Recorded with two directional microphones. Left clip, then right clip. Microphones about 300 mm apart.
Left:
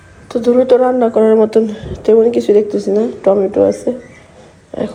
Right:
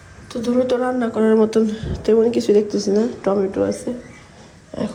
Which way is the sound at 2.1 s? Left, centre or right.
Centre.